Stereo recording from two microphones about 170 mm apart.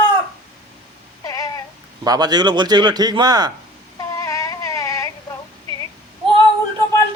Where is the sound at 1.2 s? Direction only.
20° left (ahead or behind).